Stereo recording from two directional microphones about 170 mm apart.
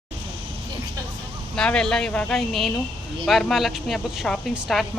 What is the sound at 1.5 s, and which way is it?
A woman's voice, 5° left (ahead or behind).